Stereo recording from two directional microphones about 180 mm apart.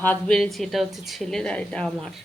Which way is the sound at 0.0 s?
5° left (ahead or behind).